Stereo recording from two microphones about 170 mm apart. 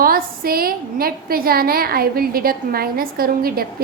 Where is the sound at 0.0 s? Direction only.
60° right (ahead or behind).